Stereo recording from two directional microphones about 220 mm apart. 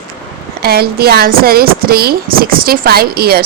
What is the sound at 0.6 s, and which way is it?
Speech, 45° right (ahead or behind).